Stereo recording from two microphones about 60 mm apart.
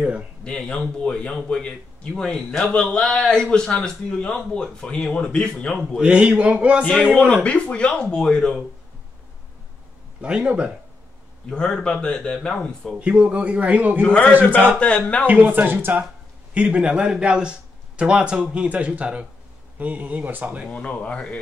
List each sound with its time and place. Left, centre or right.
0.4 s speech: centre
5.8 s a man's voice: centre
7.4 s speech: centre
10.2 s a man's voice: centre
11.4 s speech: centre
13.0 s a man's voice: right
14.0 s speech: centre
15.2 s a man's voice: right
16.5 s a man's voice: centre
20.6 s speech: centre